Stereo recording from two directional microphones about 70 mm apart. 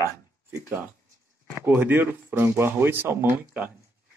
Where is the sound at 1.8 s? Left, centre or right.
Right.